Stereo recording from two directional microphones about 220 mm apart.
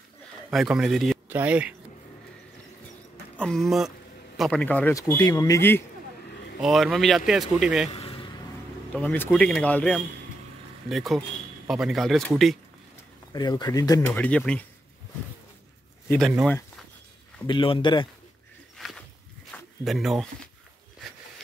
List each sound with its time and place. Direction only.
0.5 s speech: centre (ahead or behind)
3.3 s a man's voice: centre (ahead or behind)
6.6 s speech: centre (ahead or behind)
7.9 s a sound: 25° left (ahead or behind)
8.9 s a man's voice: 10° left (ahead or behind)
13.3 s a man's voice: 20° left (ahead or behind)
16.1 s speech: centre (ahead or behind)
17.5 s speech: 20° left (ahead or behind)
18.8 s a sound: centre (ahead or behind)